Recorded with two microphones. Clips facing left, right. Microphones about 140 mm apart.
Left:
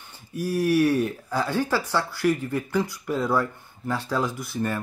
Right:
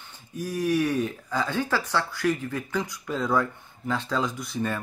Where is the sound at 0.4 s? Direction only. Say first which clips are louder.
Left 4 dB; 10° left (ahead or behind).